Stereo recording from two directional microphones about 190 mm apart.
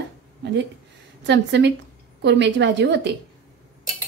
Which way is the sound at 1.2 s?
70° right (ahead or behind).